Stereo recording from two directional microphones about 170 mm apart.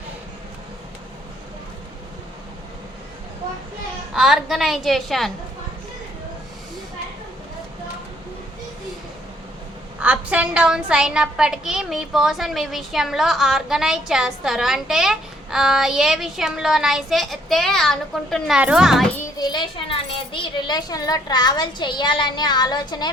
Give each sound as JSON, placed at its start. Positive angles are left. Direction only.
{"t": 4.1, "sound": "a woman's voice", "side_deg": 0}
{"t": 10.0, "sound": "a woman's voice", "side_deg": -10}
{"t": 19.4, "sound": "a woman's voice", "side_deg": 25}